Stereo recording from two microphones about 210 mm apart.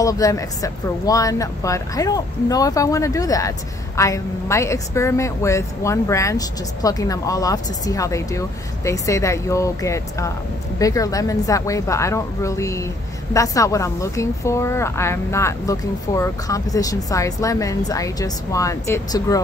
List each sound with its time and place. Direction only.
0.0 s speech: 15° left (ahead or behind)